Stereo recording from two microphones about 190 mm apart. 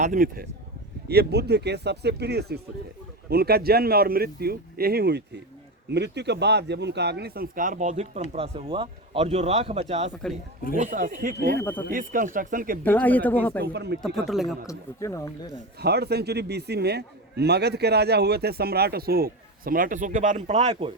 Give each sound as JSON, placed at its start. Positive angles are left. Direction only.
{"t": 0.0, "sound": "speech", "side_deg": -45}
{"t": 1.0, "sound": "a man's voice", "side_deg": -60}
{"t": 11.6, "sound": "speech", "side_deg": 10}
{"t": 11.9, "sound": "speech", "side_deg": -45}
{"t": 12.8, "sound": "speech", "side_deg": 10}
{"t": 13.6, "sound": "a man's voice", "side_deg": -60}
{"t": 14.0, "sound": "speech", "side_deg": 0}
{"t": 14.7, "sound": "speech", "side_deg": 15}
{"t": 15.8, "sound": "a man's voice", "side_deg": -60}